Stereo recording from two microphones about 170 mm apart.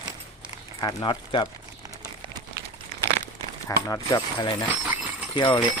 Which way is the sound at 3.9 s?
25° left (ahead or behind).